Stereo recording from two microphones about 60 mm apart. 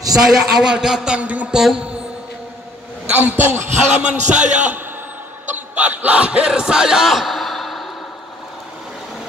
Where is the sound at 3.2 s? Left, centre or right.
Right.